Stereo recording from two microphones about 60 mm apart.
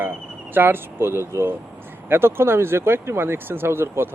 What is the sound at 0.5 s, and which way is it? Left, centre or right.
Speech, right.